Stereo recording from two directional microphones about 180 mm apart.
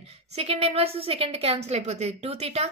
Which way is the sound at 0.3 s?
35° right (ahead or behind).